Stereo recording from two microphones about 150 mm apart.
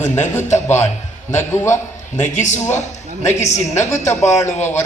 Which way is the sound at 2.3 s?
55° left (ahead or behind).